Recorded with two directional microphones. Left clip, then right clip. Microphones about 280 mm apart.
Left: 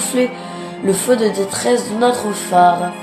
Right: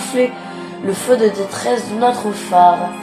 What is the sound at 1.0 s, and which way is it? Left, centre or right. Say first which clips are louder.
A woman's voice: right 3 dB; left.